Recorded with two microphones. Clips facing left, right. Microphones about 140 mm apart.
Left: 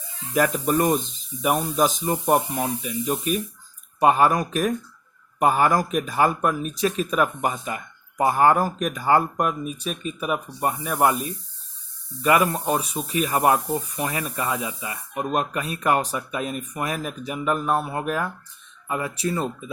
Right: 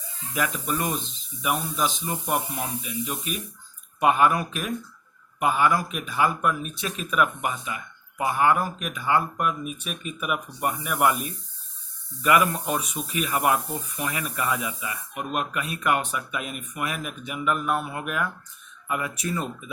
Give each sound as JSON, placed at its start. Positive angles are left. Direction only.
{"t": 0.3, "sound": "speech", "side_deg": 40}